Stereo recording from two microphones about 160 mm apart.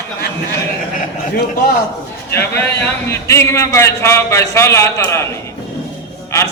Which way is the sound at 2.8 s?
15° left (ahead or behind).